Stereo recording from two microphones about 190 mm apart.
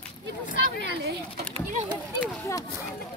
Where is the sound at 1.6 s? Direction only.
40° right (ahead or behind).